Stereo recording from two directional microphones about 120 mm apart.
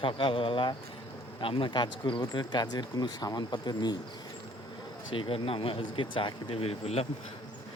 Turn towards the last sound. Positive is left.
turn(degrees=55)  # may be behind; listen again after turning